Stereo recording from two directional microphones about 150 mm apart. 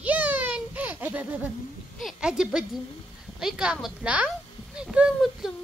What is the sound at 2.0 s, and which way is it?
A child's voice, 5° right (ahead or behind).